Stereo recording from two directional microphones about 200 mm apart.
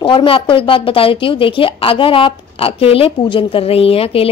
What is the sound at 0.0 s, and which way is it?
A woman's voice, 25° left (ahead or behind).